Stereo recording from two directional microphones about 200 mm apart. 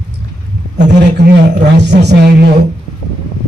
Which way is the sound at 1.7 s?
60° right (ahead or behind).